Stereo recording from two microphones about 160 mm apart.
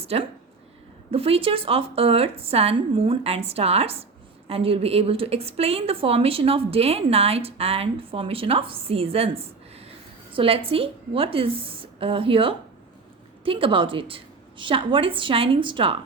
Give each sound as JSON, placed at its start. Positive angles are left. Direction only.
{"t": 0.0, "sound": "a woman's voice", "side_deg": -40}